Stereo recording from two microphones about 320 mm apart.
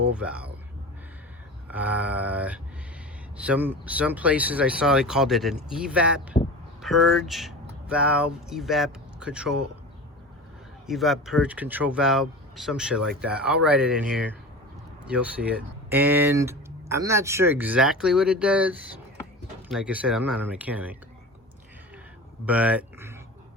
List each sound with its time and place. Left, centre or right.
0.0 s speech: centre
1.7 s speech: centre
6.3 s a sound: centre
6.8 s speech: centre
10.8 s speech: centre
22.4 s speech: centre